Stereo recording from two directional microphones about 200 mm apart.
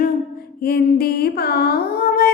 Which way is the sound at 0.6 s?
50° left (ahead or behind).